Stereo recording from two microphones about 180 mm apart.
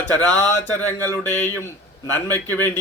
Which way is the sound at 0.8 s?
10° left (ahead or behind).